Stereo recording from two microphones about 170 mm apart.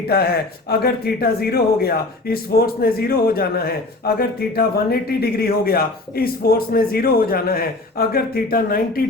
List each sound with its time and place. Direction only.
0.1 s speech: 65° left (ahead or behind)